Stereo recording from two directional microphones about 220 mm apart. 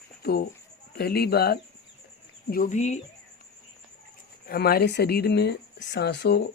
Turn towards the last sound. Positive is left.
turn(degrees=50)  # may be behind; listen again after turning